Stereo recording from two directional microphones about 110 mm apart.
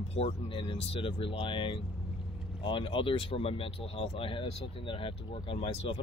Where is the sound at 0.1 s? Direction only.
60° left (ahead or behind).